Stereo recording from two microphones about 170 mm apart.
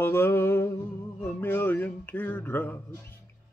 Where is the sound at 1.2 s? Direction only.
10° left (ahead or behind).